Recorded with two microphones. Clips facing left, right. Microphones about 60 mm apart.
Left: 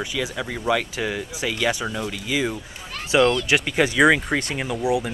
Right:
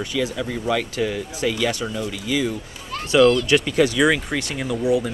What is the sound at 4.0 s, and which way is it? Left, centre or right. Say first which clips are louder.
Speech: left 2 dB; left.